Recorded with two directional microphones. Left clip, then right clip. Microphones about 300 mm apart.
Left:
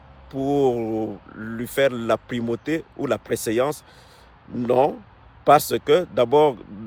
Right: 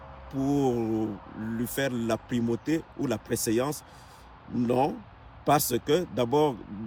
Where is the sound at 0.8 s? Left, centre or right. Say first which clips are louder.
Left 4 dB; left.